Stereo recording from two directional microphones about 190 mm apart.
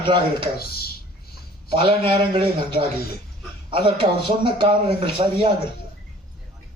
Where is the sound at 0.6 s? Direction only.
55° left (ahead or behind).